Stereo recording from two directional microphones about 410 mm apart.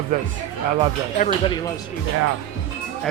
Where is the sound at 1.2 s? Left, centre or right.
Centre.